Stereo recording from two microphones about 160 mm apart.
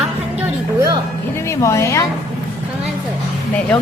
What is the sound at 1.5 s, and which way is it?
Speech, 20° left (ahead or behind).